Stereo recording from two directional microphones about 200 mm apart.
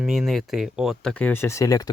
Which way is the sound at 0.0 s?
Centre (ahead or behind).